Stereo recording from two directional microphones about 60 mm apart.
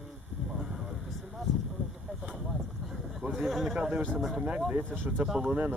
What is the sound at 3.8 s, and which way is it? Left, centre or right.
Speech, centre.